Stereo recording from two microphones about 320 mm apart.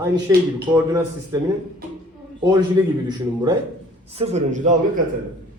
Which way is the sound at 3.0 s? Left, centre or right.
Centre.